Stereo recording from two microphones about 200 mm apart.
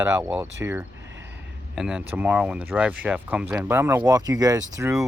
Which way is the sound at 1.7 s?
5° right (ahead or behind).